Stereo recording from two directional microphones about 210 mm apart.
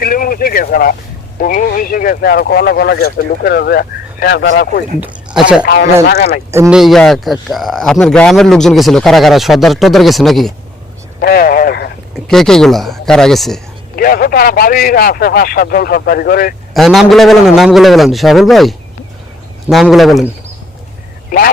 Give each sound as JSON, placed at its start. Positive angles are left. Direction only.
{"t": 0.0, "sound": "a sound", "side_deg": 45}
{"t": 1.4, "sound": "speech", "side_deg": 40}
{"t": 4.9, "sound": "a sound", "side_deg": -5}
{"t": 5.6, "sound": "speech", "side_deg": 50}
{"t": 6.5, "sound": "speech", "side_deg": -10}
{"t": 6.7, "sound": "a man's voice", "side_deg": 0}
{"t": 11.2, "sound": "vehicle", "side_deg": 45}
{"t": 12.1, "sound": "speech", "side_deg": 0}
{"t": 13.9, "sound": "speech", "side_deg": 45}
{"t": 16.7, "sound": "a man's voice", "side_deg": 0}